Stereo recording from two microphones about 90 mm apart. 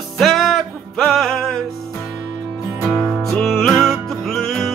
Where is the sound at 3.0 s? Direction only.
5° left (ahead or behind).